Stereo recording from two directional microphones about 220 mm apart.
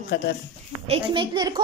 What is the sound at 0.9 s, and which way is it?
Speech, 20° right (ahead or behind).